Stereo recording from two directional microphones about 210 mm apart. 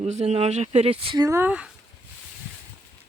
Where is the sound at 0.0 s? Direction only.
30° right (ahead or behind); by 1.7 s 5° right (ahead or behind).